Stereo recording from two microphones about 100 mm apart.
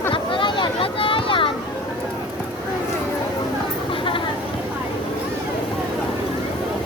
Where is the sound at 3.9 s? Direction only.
60° left (ahead or behind).